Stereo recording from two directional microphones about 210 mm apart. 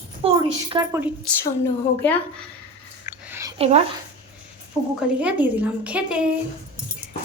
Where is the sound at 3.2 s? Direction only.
10° right (ahead or behind).